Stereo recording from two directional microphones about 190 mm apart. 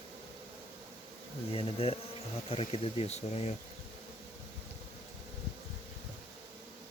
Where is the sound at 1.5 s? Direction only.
30° left (ahead or behind).